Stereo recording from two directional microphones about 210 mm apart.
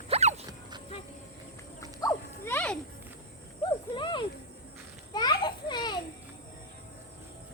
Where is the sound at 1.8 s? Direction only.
15° left (ahead or behind).